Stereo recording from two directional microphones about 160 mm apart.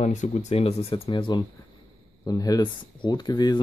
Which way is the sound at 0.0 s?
45° left (ahead or behind).